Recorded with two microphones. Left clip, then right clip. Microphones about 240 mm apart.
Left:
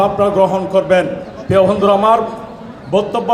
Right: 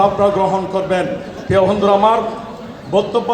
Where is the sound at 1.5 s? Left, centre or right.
Left.